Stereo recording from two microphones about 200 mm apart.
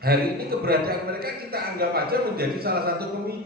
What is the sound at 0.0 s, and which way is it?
A man's voice, 50° right (ahead or behind).